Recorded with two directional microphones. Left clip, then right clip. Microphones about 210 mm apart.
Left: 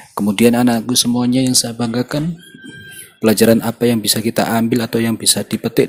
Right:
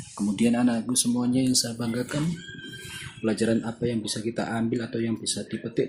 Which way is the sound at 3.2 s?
45° left (ahead or behind).